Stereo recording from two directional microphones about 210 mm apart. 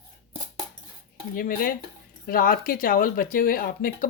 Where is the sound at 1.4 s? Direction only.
40° left (ahead or behind).